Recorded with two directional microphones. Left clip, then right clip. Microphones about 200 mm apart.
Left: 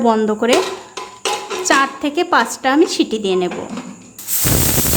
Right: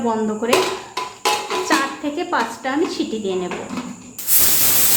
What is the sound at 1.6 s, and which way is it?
A woman's voice, 50° left (ahead or behind).